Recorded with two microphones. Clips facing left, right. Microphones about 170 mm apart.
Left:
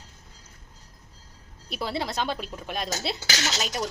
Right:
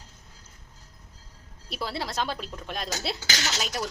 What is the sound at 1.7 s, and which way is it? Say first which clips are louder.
A woman's voice: left 2 dB; centre (ahead or behind).